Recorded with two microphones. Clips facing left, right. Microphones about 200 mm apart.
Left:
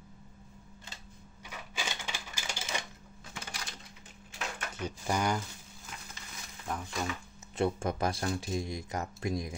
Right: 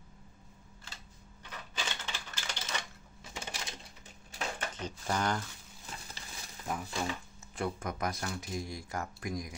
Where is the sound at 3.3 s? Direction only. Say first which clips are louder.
Right 2 dB; 20° right (ahead or behind).